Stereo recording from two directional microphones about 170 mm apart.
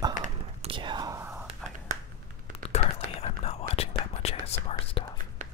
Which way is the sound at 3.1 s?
40° left (ahead or behind).